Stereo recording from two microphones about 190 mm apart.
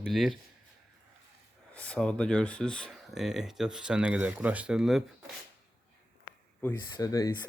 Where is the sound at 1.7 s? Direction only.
5° left (ahead or behind).